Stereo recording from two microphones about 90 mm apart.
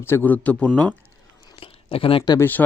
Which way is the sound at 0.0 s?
25° left (ahead or behind).